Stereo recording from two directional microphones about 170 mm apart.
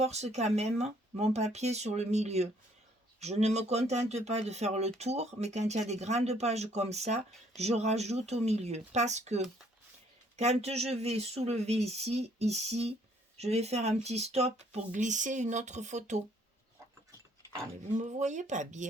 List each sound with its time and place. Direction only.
0.0 s speech: 40° right (ahead or behind)
17.9 s speech: 45° right (ahead or behind)